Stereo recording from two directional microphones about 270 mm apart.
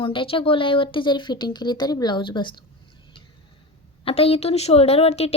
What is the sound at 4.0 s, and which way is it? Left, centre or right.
Speech, left.